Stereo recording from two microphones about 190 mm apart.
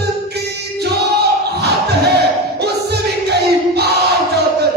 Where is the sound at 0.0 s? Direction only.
60° right (ahead or behind).